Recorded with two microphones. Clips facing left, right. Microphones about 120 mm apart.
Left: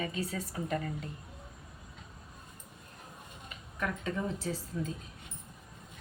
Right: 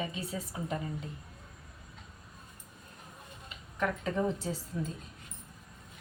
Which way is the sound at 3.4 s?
30° right (ahead or behind).